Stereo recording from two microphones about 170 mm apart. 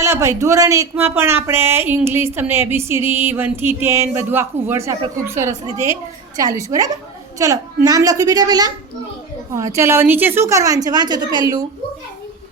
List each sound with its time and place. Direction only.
0.0 s a woman's voice: 15° right (ahead or behind)